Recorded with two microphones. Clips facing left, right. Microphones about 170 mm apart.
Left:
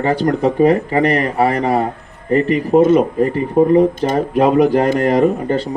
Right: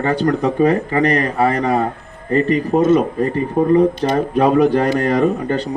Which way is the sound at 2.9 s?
20° left (ahead or behind).